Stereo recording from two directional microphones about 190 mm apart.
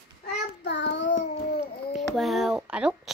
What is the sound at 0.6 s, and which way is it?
Child singing, 70° left (ahead or behind).